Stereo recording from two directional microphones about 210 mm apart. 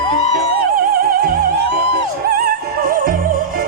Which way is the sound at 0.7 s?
45° right (ahead or behind).